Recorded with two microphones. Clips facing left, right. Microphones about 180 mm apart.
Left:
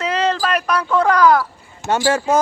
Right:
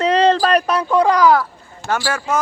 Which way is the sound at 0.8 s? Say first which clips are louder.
Left 2 dB; 15° right (ahead or behind).